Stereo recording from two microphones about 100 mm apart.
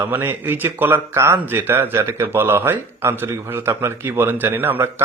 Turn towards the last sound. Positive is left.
turn(degrees=-20)  # may be behind; listen again after turning